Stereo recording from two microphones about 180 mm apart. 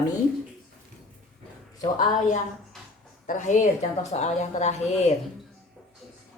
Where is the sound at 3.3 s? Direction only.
45° left (ahead or behind).